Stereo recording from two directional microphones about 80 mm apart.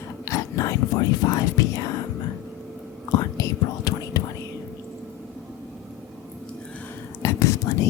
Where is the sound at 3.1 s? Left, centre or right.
Left.